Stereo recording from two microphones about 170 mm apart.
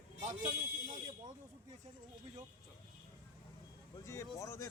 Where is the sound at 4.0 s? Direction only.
15° left (ahead or behind).